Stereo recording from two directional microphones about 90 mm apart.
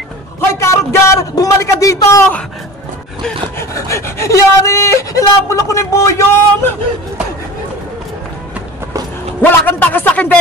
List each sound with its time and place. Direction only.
0.4 s a sound: 35° left (ahead or behind)
3.5 s speech: 30° left (ahead or behind)
9.4 s speech: 20° left (ahead or behind)